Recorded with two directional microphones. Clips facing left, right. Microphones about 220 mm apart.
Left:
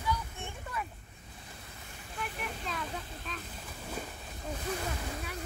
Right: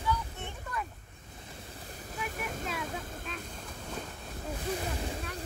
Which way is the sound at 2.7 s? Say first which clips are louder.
Right 2 dB; 5° right (ahead or behind).